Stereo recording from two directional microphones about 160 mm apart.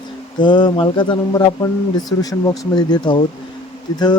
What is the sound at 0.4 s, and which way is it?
Speech, 30° left (ahead or behind).